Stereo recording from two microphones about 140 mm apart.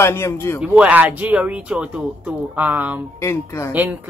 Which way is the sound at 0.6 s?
10° right (ahead or behind).